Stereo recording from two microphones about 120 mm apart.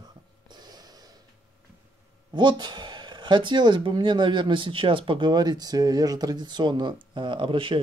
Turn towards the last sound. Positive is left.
turn(degrees=-45)  # may be behind; listen again after turning